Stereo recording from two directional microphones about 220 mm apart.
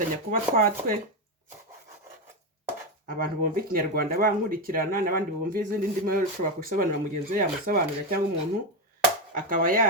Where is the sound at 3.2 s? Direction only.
40° right (ahead or behind).